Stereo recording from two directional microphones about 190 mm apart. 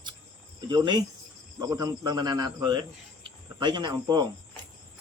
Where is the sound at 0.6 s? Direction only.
20° right (ahead or behind).